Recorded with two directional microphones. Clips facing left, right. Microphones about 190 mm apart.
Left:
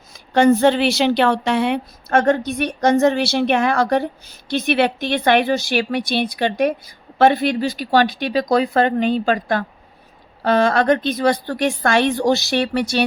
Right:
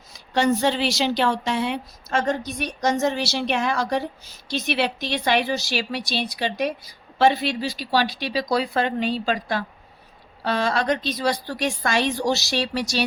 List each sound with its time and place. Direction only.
0.1 s a woman's voice: 55° left (ahead or behind)